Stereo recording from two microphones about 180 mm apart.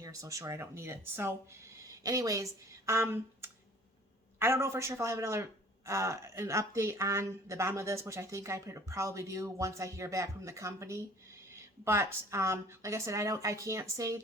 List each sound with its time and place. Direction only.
0.0 s a man's voice: 20° right (ahead or behind)